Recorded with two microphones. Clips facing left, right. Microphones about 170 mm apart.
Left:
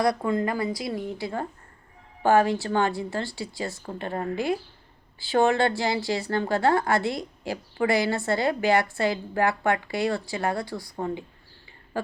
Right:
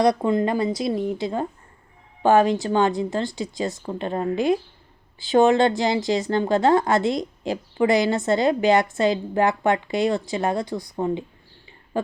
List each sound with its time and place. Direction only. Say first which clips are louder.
0.0 s a woman's voice: right 5 dB; 20° right (ahead or behind)